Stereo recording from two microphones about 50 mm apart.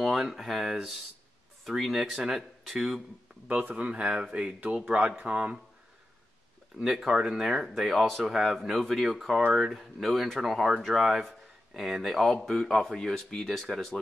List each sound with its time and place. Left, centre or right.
0.0 s speech: centre
3.4 s speech: right
6.8 s speech: centre